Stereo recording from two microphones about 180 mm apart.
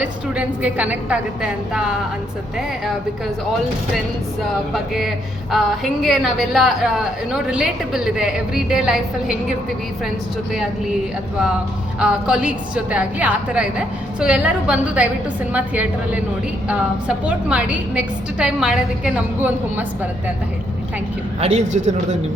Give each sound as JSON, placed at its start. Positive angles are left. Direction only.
{"t": 0.0, "sound": "a woman's voice", "side_deg": -10}
{"t": 4.7, "sound": "a woman's voice", "side_deg": 0}
{"t": 11.9, "sound": "a woman's voice", "side_deg": -5}
{"t": 21.4, "sound": "a man's voice", "side_deg": -40}